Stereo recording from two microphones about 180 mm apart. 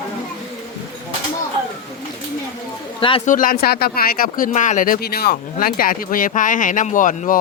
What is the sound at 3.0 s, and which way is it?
Speech, 30° left (ahead or behind).